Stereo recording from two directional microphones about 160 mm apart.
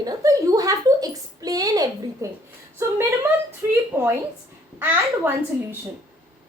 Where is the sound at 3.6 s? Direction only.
15° right (ahead or behind).